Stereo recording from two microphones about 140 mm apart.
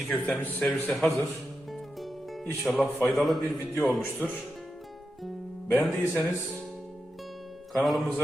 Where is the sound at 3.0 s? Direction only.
Centre (ahead or behind).